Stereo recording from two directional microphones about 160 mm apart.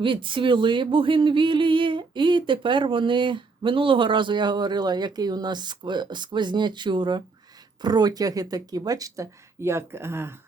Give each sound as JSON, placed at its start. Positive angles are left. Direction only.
{"t": 0.0, "sound": "speech", "side_deg": -30}